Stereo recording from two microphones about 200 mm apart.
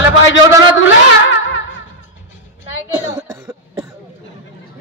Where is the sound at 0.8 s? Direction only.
70° left (ahead or behind).